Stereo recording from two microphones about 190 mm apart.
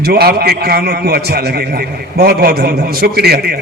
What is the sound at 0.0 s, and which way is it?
A man's voice, 55° right (ahead or behind).